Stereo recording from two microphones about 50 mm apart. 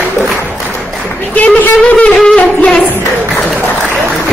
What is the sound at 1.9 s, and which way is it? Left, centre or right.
Wind instrument, left.